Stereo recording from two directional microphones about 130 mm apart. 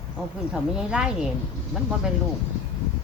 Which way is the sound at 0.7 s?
5° right (ahead or behind).